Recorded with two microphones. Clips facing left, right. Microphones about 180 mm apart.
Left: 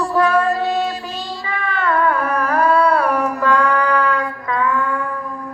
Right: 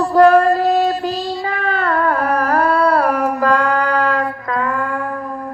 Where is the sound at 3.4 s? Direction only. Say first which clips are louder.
Even; 35° right (ahead or behind).